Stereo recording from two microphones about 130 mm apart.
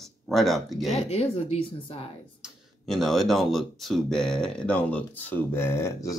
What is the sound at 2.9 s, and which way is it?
Speech, centre (ahead or behind).